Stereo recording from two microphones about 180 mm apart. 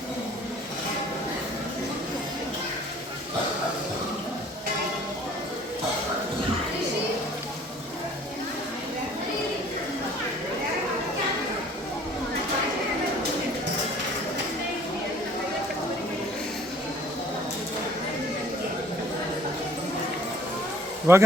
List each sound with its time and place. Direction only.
21.1 s speech: 15° right (ahead or behind)